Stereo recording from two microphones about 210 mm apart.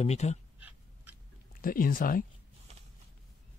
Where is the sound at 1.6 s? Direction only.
45° left (ahead or behind).